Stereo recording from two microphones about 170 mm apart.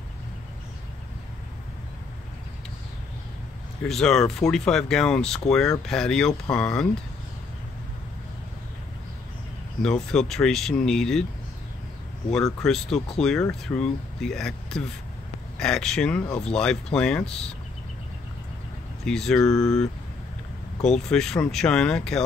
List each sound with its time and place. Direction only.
3.8 s speech: 5° left (ahead or behind)
9.8 s speech: 5° left (ahead or behind)
12.6 s speech: 5° left (ahead or behind)
19.0 s speech: 5° left (ahead or behind)
19.4 s speech: 20° left (ahead or behind)
20.9 s speech: 5° left (ahead or behind)